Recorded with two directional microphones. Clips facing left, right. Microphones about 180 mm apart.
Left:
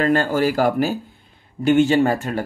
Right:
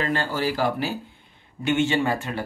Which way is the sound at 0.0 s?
45° left (ahead or behind).